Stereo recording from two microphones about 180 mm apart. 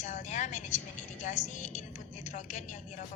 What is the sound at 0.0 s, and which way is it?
Vehicle, 40° left (ahead or behind).